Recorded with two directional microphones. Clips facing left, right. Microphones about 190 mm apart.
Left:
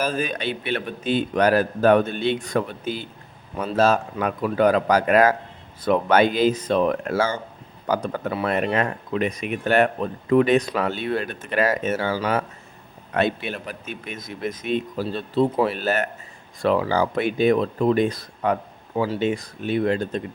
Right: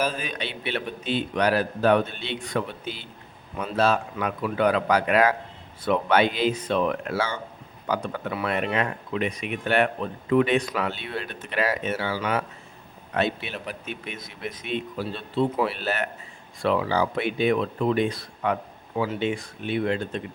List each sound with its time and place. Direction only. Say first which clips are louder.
0.1 s speech: left 7 dB; 50° left (ahead or behind)